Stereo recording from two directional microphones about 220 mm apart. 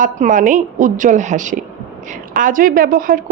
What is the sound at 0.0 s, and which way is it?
A woman's voice, 35° right (ahead or behind).